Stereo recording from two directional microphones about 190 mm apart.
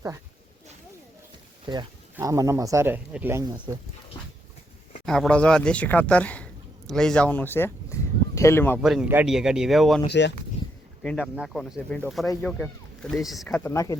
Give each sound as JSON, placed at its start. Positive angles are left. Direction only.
{"t": 2.1, "sound": "speech", "side_deg": -15}
{"t": 5.0, "sound": "speech", "side_deg": 5}
{"t": 8.8, "sound": "speech", "side_deg": -5}
{"t": 10.1, "sound": "speech", "side_deg": 65}
{"t": 11.0, "sound": "speech", "side_deg": 0}
{"t": 13.7, "sound": "speech", "side_deg": 15}